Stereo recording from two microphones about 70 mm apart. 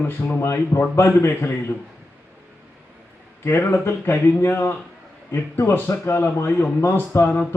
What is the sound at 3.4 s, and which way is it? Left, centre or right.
A man's voice, left.